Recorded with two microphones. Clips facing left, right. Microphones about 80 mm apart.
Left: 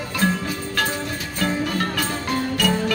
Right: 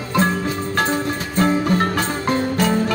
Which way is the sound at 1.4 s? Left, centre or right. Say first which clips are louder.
Right 6 dB; right.